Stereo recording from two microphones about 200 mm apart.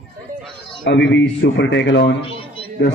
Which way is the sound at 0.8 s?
65° left (ahead or behind).